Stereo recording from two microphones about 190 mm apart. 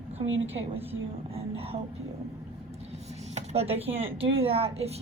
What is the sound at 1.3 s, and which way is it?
Speech, 30° right (ahead or behind).